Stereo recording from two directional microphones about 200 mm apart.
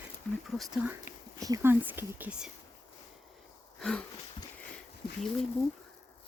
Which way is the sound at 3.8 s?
5° left (ahead or behind).